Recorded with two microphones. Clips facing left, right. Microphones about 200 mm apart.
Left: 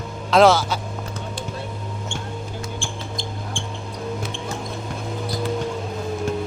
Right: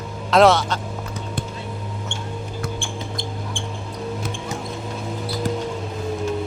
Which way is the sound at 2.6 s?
60° right (ahead or behind).